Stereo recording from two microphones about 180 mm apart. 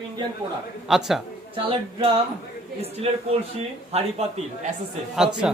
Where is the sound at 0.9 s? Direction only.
Centre (ahead or behind).